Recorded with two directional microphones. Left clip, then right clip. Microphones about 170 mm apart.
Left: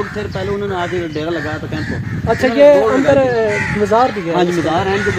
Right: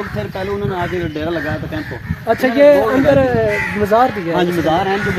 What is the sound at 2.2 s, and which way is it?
Speech, 10° left (ahead or behind).